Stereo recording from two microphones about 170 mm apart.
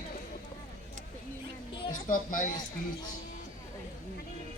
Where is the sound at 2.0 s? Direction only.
55° left (ahead or behind).